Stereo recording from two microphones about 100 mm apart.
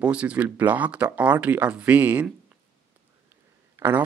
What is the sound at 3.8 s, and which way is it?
Speech, 30° right (ahead or behind).